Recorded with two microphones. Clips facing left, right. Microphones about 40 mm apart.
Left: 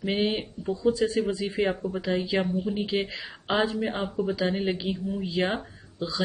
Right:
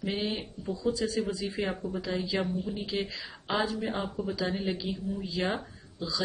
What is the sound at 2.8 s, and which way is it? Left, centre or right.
Speech, left.